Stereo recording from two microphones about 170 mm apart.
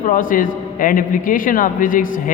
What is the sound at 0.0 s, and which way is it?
A man's voice, 50° left (ahead or behind).